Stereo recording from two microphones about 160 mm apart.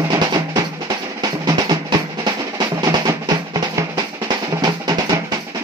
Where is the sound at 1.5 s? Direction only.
25° right (ahead or behind).